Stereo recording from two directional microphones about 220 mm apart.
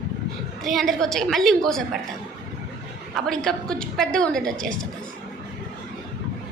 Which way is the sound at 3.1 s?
Centre (ahead or behind).